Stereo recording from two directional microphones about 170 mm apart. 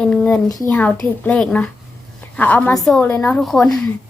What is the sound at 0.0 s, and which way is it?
A child's voice, 5° left (ahead or behind).